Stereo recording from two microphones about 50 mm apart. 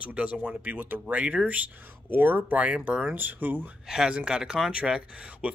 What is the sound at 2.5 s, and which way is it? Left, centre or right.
Speech, right.